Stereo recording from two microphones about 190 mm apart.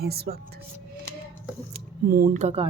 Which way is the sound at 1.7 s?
50° right (ahead or behind).